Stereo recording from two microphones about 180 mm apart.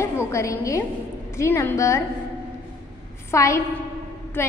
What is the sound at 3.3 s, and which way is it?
A woman's voice, 15° left (ahead or behind).